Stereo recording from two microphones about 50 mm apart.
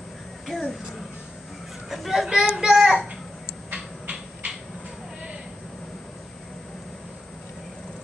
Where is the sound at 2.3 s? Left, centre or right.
Centre.